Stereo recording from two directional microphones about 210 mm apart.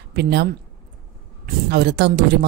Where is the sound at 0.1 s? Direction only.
50° right (ahead or behind).